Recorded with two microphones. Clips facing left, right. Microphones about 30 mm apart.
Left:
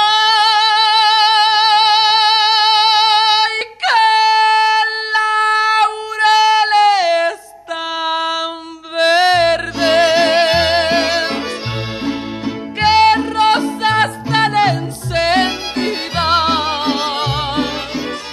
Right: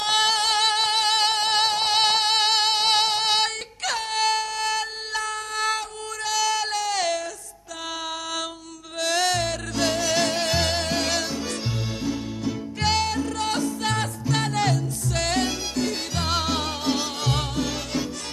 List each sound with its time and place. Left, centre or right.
0.1 s singing: left
2.0 s female singing: left
4.4 s music: left
6.1 s a sound: left
8.9 s music: left